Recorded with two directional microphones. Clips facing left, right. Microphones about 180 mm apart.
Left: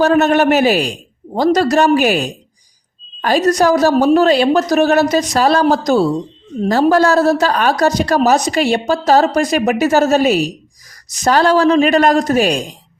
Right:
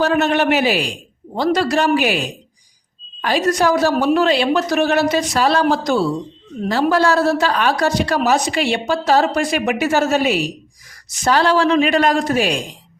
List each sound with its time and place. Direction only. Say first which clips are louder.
0.0 s a man's voice: left 4 dB; 45° left (ahead or behind)